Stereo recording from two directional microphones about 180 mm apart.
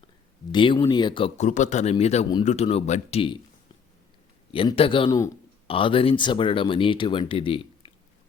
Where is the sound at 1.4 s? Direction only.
45° left (ahead or behind).